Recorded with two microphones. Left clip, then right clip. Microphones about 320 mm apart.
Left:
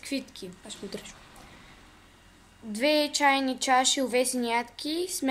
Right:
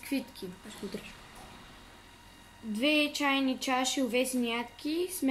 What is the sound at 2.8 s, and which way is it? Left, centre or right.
A woman's voice, centre.